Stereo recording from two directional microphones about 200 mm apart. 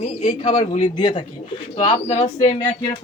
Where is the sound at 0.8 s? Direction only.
25° left (ahead or behind).